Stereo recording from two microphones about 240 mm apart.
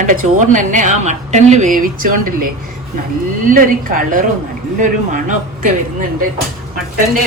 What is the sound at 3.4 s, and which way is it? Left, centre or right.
A woman's voice, right.